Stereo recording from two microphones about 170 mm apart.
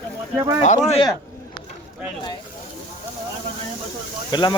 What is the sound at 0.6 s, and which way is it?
Speech, 40° left (ahead or behind).